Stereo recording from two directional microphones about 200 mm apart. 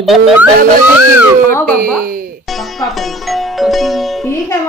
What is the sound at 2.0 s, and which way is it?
Music, 45° right (ahead or behind).